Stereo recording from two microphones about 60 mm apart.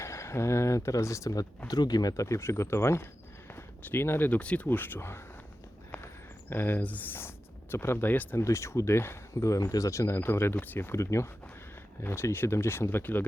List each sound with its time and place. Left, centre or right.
0.0 s speech: left
2.2 s speech: left
3.5 s a sound: left
4.3 s speech: left
4.7 s speech: left
4.9 s speech: left
6.5 s speech: left
8.1 s speech: left
8.4 s speech: left
10.2 s speech: left
10.9 s speech: left
12.0 s speech: left